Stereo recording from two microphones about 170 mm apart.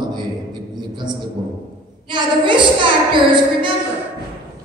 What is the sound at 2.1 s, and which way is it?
A man's voice, 30° right (ahead or behind).